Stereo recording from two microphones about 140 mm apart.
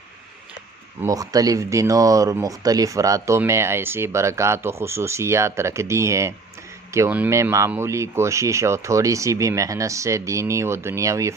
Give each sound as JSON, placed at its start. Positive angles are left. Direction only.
{"t": 1.0, "sound": "speech", "side_deg": -25}